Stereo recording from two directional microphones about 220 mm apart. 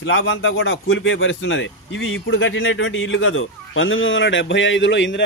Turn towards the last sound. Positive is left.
turn(degrees=55)  # may be behind; listen again after turning